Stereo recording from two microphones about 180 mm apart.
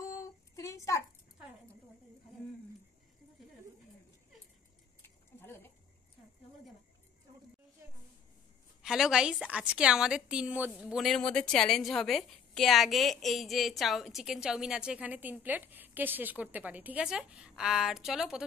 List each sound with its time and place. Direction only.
0.0 s child singing: 15° left (ahead or behind)
5.0 s a sound: 10° left (ahead or behind)
8.8 s a woman's voice: centre (ahead or behind)